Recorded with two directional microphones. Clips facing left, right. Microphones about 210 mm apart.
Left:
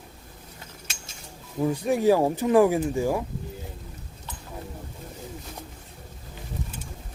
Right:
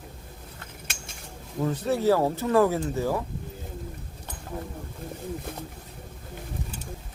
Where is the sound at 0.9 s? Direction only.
55° right (ahead or behind).